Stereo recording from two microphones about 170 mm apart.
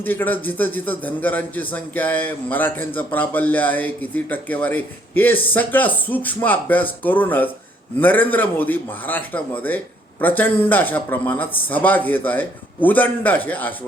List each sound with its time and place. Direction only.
0.0 s a man's voice: 10° left (ahead or behind)